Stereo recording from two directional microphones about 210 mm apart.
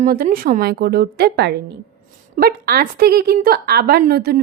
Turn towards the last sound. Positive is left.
turn(degrees=-50)  # may be behind; listen again after turning